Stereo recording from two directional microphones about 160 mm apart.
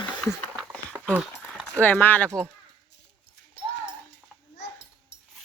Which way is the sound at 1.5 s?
10° left (ahead or behind).